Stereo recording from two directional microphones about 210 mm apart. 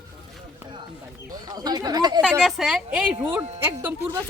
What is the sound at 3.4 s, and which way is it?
Speech, 30° right (ahead or behind).